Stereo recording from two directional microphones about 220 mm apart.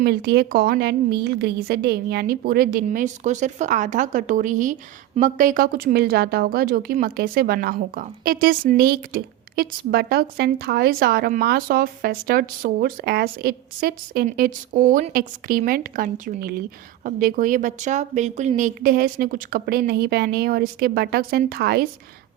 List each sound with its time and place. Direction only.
0.0 s a woman's voice: 45° right (ahead or behind)